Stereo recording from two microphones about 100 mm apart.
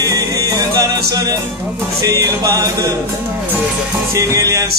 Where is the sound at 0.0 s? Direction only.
35° right (ahead or behind).